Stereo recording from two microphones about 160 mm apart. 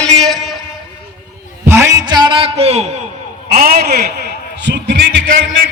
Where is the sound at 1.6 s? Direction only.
15° right (ahead or behind); by 2.9 s 40° right (ahead or behind).